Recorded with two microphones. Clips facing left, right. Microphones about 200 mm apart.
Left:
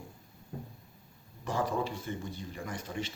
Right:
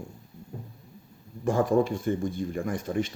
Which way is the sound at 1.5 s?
50° right (ahead or behind).